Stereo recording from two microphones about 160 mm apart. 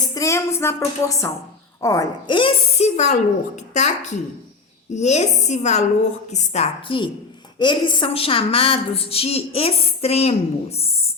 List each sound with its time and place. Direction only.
0.1 s a woman's voice: 20° left (ahead or behind)
2.7 s a woman's voice: 45° left (ahead or behind)